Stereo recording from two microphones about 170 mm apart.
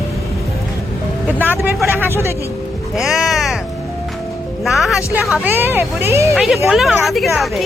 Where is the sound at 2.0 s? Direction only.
15° right (ahead or behind).